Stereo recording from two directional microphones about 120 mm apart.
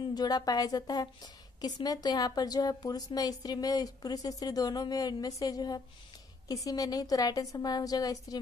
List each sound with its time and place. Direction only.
0.0 s a woman's voice: 35° left (ahead or behind)